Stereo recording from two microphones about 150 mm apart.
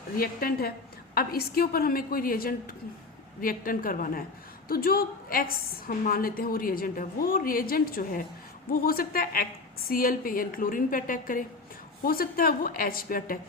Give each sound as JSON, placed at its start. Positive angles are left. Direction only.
{"t": 0.2, "sound": "a woman's voice", "side_deg": 90}